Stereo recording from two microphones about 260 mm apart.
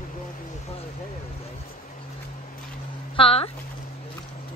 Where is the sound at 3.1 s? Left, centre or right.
Left.